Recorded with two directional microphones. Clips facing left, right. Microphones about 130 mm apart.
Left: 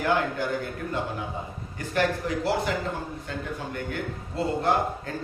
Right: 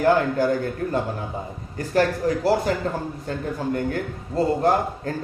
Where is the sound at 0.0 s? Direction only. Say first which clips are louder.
Right 7 dB; 40° right (ahead or behind).